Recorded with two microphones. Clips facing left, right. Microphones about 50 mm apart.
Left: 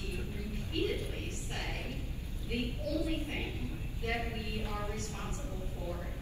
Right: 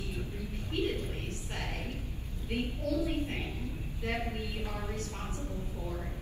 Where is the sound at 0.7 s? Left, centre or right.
Right.